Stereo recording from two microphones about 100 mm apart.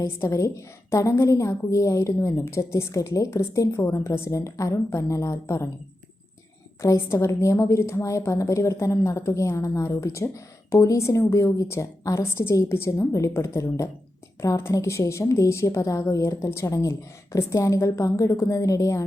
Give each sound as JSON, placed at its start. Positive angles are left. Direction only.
{"t": 0.0, "sound": "a woman's voice", "side_deg": 30}
{"t": 6.8, "sound": "a woman's voice", "side_deg": 25}